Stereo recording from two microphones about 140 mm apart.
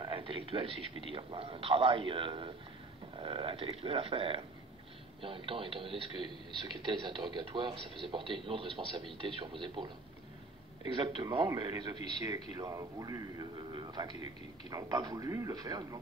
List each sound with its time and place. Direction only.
0.0 s a man's voice: 40° right (ahead or behind)